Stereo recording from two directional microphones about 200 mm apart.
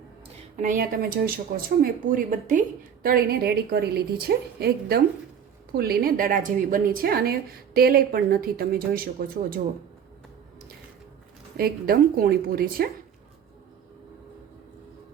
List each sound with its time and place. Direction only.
0.5 s a woman's voice: 40° right (ahead or behind)
11.5 s a woman's voice: 50° right (ahead or behind)